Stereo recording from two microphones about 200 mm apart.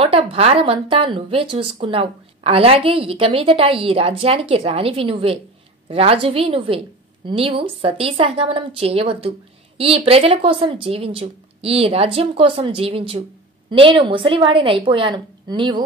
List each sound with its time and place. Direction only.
0.0 s a woman's voice: 30° right (ahead or behind)